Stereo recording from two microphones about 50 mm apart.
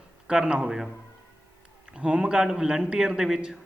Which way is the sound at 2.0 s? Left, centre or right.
Right.